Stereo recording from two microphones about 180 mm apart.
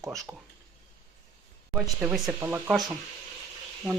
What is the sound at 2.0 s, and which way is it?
Speech, 5° right (ahead or behind).